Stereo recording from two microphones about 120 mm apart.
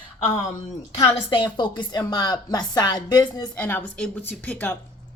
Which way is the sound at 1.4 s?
40° left (ahead or behind).